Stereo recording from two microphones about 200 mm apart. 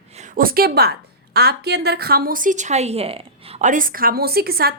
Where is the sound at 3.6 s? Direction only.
40° right (ahead or behind).